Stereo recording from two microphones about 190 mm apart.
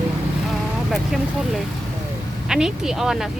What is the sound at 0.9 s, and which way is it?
Speech, centre (ahead or behind).